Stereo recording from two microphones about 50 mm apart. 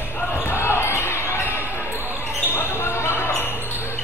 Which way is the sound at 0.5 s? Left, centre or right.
Left.